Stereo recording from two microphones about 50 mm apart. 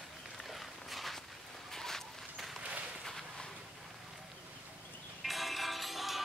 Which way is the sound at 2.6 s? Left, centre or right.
Right.